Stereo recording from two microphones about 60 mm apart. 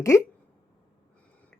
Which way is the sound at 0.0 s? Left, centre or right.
Left.